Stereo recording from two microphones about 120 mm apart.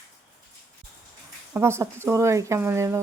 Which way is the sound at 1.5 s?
20° right (ahead or behind).